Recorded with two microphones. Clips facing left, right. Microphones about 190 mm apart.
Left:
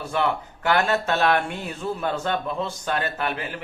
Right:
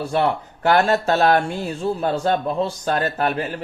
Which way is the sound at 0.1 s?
35° right (ahead or behind).